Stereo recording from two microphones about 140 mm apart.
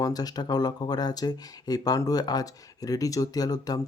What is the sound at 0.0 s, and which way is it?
Speech, 25° left (ahead or behind).